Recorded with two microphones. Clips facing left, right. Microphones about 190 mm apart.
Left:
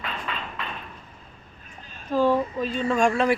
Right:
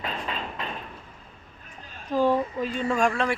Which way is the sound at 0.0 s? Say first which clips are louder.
Right 1 dB; 35° right (ahead or behind).